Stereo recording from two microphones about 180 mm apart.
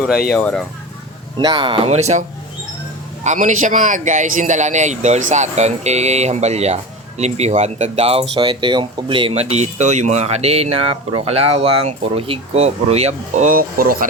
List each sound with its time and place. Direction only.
0.3 s speech: 5° left (ahead or behind)
1.4 s speech: 25° right (ahead or behind)
3.2 s speech: 45° right (ahead or behind)